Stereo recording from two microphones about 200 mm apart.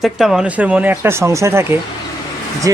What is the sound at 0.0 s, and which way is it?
Speech, 5° right (ahead or behind).